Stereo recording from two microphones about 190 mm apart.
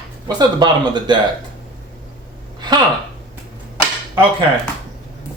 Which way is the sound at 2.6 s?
20° right (ahead or behind).